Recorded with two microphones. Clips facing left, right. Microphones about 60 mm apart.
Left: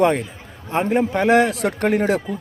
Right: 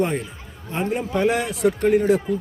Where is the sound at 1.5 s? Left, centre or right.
Left.